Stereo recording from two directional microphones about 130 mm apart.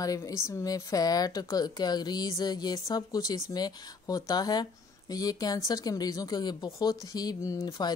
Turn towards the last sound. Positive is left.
turn(degrees=25)  # may be behind; listen again after turning